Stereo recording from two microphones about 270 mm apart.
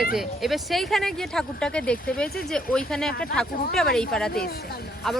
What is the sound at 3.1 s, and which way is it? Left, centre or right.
Speech, left.